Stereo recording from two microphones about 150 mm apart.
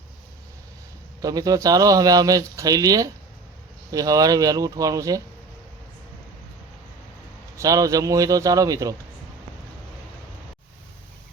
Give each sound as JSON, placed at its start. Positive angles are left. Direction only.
{"t": 1.2, "sound": "speech", "side_deg": -25}
{"t": 7.5, "sound": "speech", "side_deg": -20}